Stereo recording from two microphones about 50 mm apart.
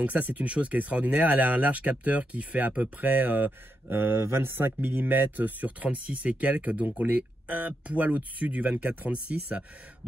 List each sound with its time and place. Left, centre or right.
0.0 s speech: right
3.9 s speech: right